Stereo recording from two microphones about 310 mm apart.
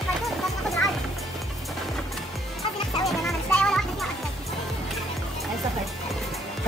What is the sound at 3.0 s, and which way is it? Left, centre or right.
Music, centre.